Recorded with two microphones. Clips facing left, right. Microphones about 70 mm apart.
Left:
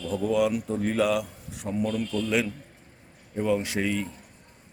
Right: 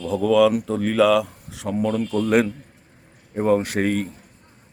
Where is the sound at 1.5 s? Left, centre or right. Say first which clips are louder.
Right 5 dB; right.